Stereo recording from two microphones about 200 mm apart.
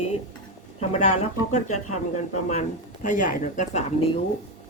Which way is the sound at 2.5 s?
35° left (ahead or behind).